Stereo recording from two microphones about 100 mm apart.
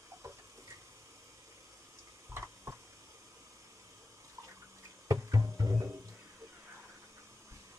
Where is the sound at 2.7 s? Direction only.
30° right (ahead or behind).